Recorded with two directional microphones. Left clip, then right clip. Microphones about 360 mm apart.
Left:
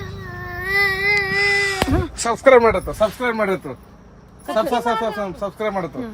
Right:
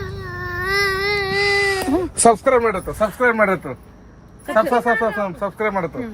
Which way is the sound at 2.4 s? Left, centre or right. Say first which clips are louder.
Left 4 dB; left.